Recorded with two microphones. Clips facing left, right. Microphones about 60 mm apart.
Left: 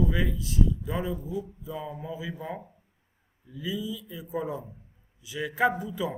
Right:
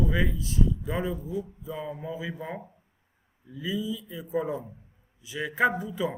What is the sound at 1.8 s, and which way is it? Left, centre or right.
Speech, centre.